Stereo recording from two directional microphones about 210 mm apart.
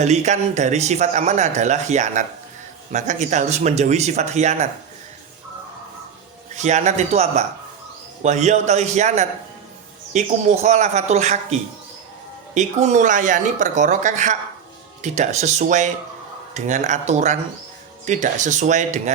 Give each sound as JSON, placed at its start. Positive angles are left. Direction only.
{"t": 0.0, "sound": "speech", "side_deg": -35}
{"t": 6.6, "sound": "speech", "side_deg": -35}
{"t": 12.5, "sound": "speech", "side_deg": -35}